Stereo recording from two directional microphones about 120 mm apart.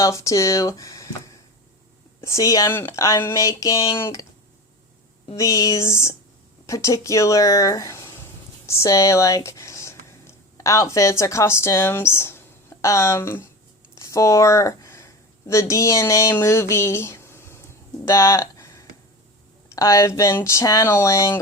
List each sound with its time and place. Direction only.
0.0 s speech: 25° left (ahead or behind)
5.4 s speech: 25° left (ahead or behind)